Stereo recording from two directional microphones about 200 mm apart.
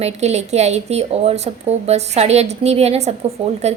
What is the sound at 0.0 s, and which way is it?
A woman's voice, 35° right (ahead or behind).